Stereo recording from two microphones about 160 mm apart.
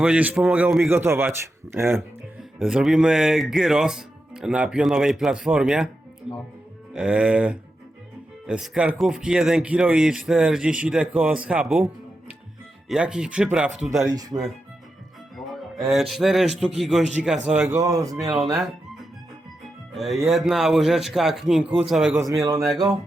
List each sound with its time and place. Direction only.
0.0 s speech: 10° right (ahead or behind)
2.4 s speech: 5° right (ahead or behind)
6.9 s speech: 5° right (ahead or behind)
12.9 s speech: 5° right (ahead or behind)
14.0 s speech: 25° right (ahead or behind)
15.4 s music: 20° left (ahead or behind)
16.0 s speech: centre (ahead or behind); by 18.3 s 20° right (ahead or behind)
18.3 s speech: centre (ahead or behind)
19.9 s speech: centre (ahead or behind)
22.3 s speech: 20° right (ahead or behind)